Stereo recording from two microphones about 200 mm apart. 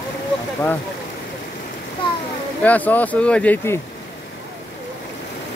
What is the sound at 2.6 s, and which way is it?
Speech, 10° left (ahead or behind).